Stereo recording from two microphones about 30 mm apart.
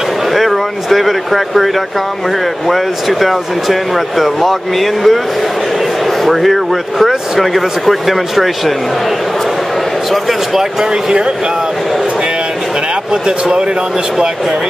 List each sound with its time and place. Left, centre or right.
0.3 s a sound: centre
2.7 s speech: centre
6.2 s speech: centre
13.1 s speech: right